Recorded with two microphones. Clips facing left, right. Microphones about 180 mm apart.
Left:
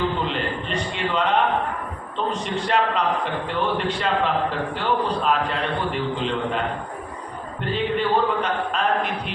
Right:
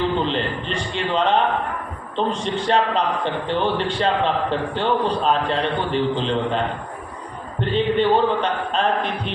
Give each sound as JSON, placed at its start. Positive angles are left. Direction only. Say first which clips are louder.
{"t": 0.2, "sound": "a man's voice", "louder": "right 3 dB", "side_deg": -30}
{"t": 7.6, "sound": "a man's voice", "louder": "right 5 dB", "side_deg": -30}